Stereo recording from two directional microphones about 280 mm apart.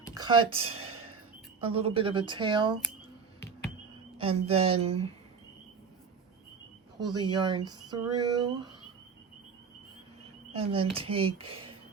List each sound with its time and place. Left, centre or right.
0.1 s speech: centre
4.2 s a woman's voice: centre
7.1 s speech: centre
10.6 s a woman's voice: centre